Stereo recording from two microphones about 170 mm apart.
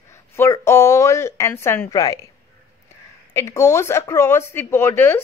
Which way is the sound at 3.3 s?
15° left (ahead or behind).